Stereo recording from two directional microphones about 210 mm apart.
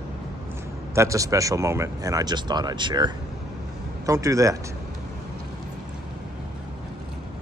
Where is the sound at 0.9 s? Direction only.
15° right (ahead or behind).